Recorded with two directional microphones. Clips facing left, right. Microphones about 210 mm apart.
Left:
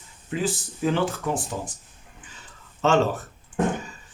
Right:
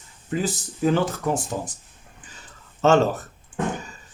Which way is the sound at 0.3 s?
45° right (ahead or behind).